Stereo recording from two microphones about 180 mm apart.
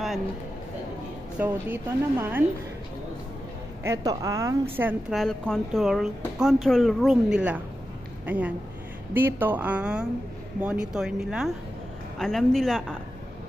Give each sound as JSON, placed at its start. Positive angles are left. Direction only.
{"t": 1.4, "sound": "a woman's voice", "side_deg": -10}
{"t": 3.8, "sound": "a woman's voice", "side_deg": -20}
{"t": 5.1, "sound": "a woman's voice", "side_deg": 0}